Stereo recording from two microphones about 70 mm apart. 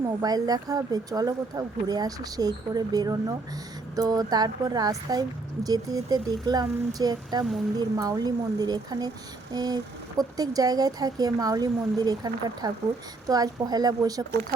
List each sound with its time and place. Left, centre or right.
0.2 s speech: right
7.8 s speech: right